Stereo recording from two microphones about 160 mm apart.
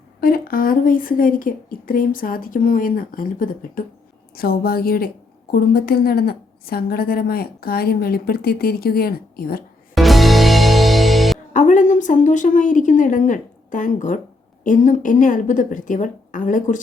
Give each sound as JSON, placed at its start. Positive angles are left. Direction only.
{"t": 0.2, "sound": "a woman's voice", "side_deg": 65}
{"t": 9.9, "sound": "music", "side_deg": 0}
{"t": 11.5, "sound": "a woman's voice", "side_deg": 55}